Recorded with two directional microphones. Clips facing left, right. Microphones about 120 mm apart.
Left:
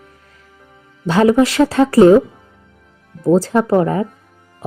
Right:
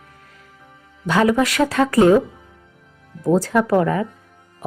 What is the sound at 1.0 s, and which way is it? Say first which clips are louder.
Speech: left 5 dB; 30° left (ahead or behind).